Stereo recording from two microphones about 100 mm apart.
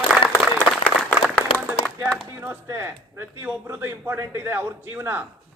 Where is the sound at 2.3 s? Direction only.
25° right (ahead or behind).